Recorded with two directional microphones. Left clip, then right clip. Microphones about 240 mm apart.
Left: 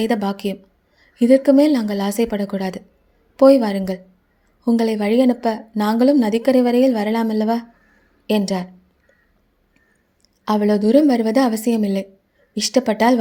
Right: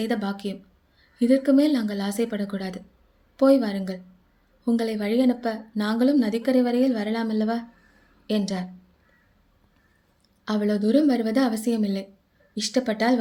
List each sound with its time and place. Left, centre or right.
0.0 s a woman's voice: left
10.4 s a woman's voice: left